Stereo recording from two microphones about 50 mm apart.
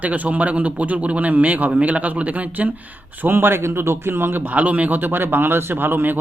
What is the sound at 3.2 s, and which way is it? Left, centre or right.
Speech, right.